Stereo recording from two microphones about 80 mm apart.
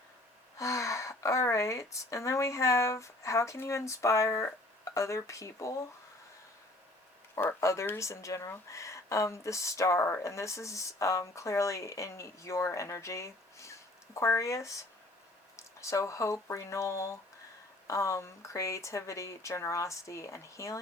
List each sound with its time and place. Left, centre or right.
0.6 s speech: left
7.6 s speech: left